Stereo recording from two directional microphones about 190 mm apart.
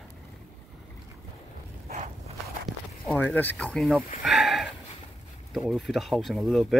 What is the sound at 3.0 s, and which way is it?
Speech, 5° left (ahead or behind).